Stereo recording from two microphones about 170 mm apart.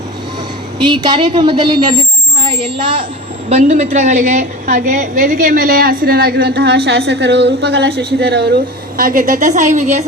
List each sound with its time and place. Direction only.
0.9 s a woman's voice: 25° right (ahead or behind)
3.5 s a woman's voice: 40° right (ahead or behind); by 8.4 s 80° right
9.0 s a woman's voice: 55° right (ahead or behind)